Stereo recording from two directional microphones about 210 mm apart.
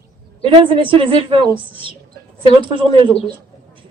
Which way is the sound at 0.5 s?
25° right (ahead or behind).